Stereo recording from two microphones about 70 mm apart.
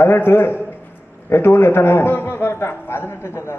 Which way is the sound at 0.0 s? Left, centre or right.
Left.